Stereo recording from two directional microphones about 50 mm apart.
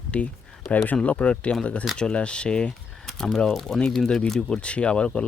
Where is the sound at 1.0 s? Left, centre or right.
Left.